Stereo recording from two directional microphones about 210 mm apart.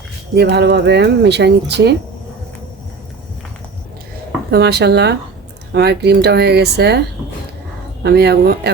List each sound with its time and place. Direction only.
0.3 s speech: 50° right (ahead or behind)
4.5 s speech: 50° right (ahead or behind)
8.0 s speech: 50° right (ahead or behind)